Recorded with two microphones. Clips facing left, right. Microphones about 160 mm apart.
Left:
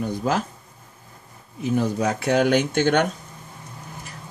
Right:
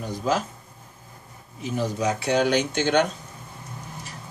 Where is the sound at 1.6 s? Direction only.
55° left (ahead or behind).